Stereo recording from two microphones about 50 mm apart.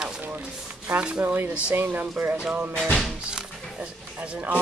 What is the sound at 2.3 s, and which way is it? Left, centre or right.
Speech, right.